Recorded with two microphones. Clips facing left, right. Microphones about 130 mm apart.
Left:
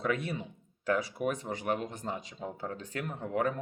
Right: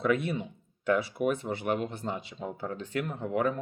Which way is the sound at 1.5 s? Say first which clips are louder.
Right 3 dB; 35° left (ahead or behind).